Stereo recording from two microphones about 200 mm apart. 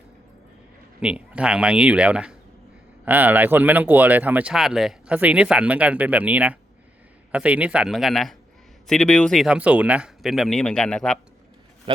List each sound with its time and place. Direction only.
0.9 s speech: 5° right (ahead or behind)
11.9 s speech: 25° right (ahead or behind)